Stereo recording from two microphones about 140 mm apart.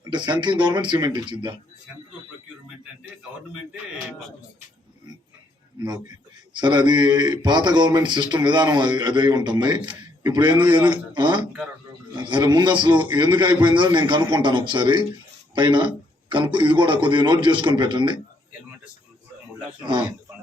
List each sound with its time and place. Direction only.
0.0 s a man's voice: 30° right (ahead or behind)
5.8 s a man's voice: 30° right (ahead or behind)
19.8 s a man's voice: 35° right (ahead or behind)